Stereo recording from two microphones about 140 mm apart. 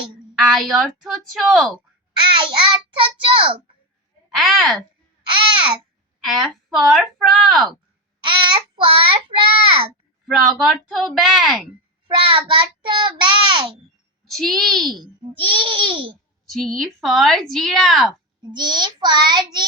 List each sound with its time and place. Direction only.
0.4 s a woman's voice: centre (ahead or behind)
2.1 s a child's voice: 35° right (ahead or behind)
4.3 s a woman's voice: centre (ahead or behind)
6.2 s a woman's voice: centre (ahead or behind)
8.2 s a child's voice: 35° right (ahead or behind)
10.3 s a woman's voice: centre (ahead or behind)
12.3 s a child's voice: 35° right (ahead or behind)
14.3 s a woman's voice: centre (ahead or behind)
15.0 s a child's voice: 35° right (ahead or behind)
16.5 s a woman's voice: centre (ahead or behind)
18.5 s a child's voice: 30° right (ahead or behind)